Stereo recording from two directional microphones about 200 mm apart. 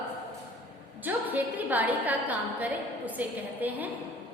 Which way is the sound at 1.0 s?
10° right (ahead or behind).